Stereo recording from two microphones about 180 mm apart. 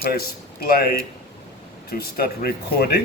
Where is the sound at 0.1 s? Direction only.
60° left (ahead or behind).